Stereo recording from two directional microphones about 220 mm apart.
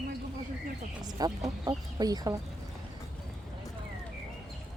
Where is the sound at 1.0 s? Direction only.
15° right (ahead or behind).